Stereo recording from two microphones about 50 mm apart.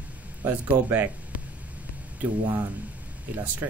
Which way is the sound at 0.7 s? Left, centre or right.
Right.